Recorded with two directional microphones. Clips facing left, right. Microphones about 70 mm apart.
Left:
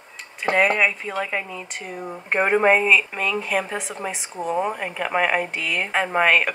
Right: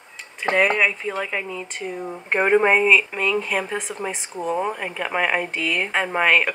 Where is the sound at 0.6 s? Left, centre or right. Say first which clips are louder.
Even; centre.